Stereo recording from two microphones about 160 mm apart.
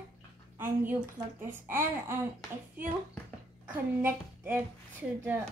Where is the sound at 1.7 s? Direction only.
15° right (ahead or behind).